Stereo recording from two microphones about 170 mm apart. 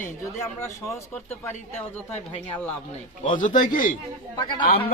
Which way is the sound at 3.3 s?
50° left (ahead or behind).